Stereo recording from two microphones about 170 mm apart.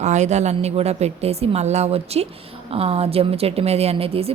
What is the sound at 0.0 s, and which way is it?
A woman's voice, 45° right (ahead or behind).